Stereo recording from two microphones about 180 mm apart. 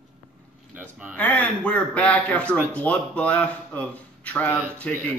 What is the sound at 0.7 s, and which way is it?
Speech, 10° right (ahead or behind).